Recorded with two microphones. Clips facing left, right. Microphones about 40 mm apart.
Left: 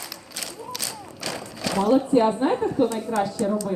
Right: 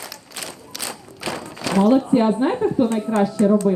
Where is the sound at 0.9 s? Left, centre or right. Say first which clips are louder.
Right 4 dB; right.